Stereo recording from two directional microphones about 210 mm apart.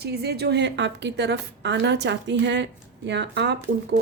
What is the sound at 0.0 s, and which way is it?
A woman's voice, 50° right (ahead or behind).